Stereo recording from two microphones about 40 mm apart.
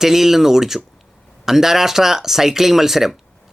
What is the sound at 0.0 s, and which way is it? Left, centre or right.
Speech, centre.